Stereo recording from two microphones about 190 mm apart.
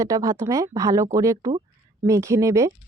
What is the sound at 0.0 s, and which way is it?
Speech, 20° right (ahead or behind).